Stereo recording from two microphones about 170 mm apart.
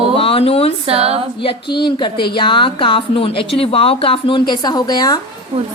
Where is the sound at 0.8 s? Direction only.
35° right (ahead or behind).